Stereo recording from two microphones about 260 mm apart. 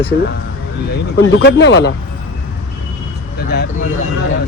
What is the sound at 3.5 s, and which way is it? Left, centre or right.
Speech, left.